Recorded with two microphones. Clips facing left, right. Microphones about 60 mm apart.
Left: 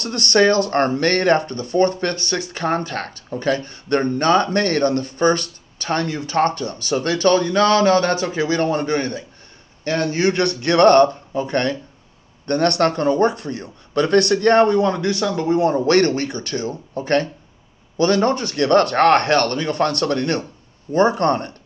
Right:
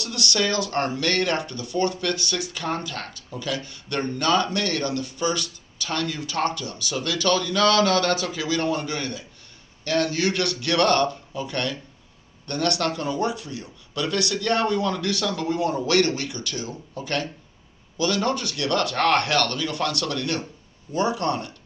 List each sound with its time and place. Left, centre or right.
0.0 s speech: left